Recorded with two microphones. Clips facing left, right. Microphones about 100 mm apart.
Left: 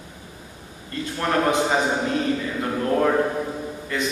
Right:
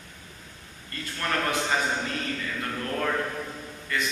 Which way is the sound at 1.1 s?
20° left (ahead or behind).